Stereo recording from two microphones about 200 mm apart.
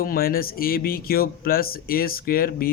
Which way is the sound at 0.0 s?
45° left (ahead or behind).